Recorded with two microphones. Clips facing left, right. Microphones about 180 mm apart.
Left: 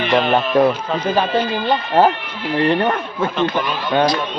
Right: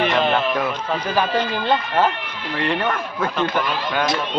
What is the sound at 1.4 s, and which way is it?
Speech, 15° left (ahead or behind).